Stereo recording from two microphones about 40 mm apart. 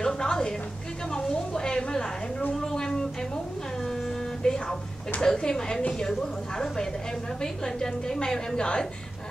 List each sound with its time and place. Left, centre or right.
0.0 s music: centre
1.1 s a sound: centre
4.4 s music: left
5.2 s a woman's voice: centre
7.4 s a woman's voice: centre